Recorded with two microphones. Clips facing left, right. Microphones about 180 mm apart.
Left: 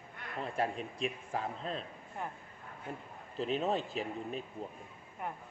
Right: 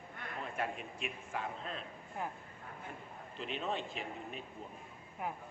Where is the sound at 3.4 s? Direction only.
40° left (ahead or behind).